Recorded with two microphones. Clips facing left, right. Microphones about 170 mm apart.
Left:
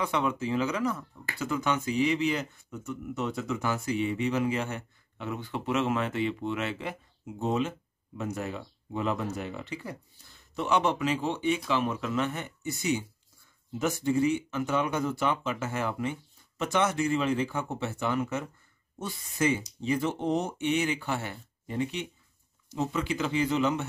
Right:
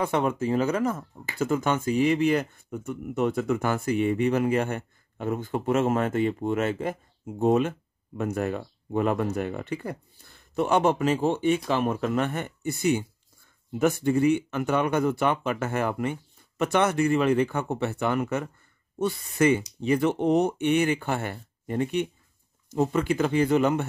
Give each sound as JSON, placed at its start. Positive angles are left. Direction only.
{"t": 0.0, "sound": "speech", "side_deg": -50}